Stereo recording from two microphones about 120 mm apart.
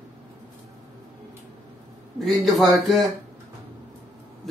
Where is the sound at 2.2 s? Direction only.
Centre (ahead or behind).